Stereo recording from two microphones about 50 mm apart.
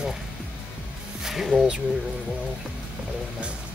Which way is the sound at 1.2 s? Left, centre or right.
Centre.